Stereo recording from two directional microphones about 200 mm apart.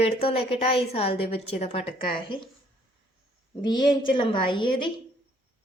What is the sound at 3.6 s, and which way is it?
A woman's voice, 20° left (ahead or behind).